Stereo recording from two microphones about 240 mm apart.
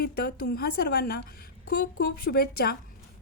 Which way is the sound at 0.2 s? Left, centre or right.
Left.